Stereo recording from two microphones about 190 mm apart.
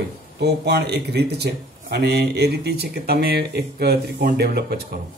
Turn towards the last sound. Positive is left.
turn(degrees=-55)  # may be behind; listen again after turning